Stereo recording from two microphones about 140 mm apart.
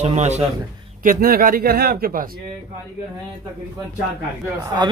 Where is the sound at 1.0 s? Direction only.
90° right.